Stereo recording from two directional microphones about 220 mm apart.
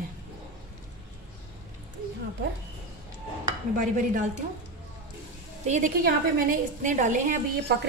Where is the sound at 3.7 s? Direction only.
35° right (ahead or behind).